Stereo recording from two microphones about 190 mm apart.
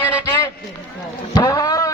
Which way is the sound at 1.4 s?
20° left (ahead or behind).